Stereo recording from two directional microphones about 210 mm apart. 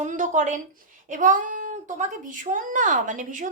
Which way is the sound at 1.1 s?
40° right (ahead or behind).